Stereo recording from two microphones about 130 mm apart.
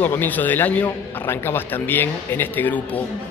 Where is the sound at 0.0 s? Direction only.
15° left (ahead or behind).